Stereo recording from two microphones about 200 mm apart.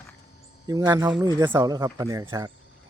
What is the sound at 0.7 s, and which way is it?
Speech, 15° right (ahead or behind).